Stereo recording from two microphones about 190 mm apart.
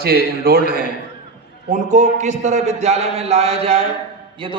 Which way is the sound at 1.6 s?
40° right (ahead or behind).